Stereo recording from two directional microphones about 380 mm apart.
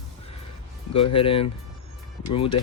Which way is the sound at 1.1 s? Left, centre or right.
Centre.